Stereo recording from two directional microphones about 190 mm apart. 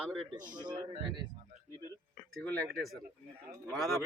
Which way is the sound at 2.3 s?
Centre (ahead or behind).